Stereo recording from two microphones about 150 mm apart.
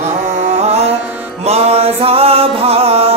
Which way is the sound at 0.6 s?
45° right (ahead or behind).